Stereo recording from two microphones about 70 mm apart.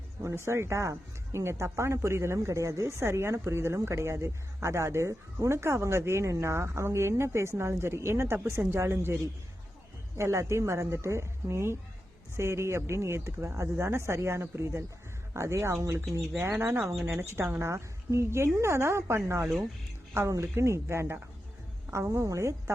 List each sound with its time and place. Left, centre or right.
0.2 s speech: right
10.2 s speech: right
16.4 s speech: right